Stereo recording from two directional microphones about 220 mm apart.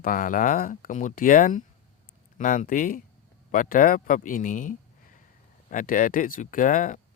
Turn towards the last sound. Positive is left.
turn(degrees=35)  # may be behind; listen again after turning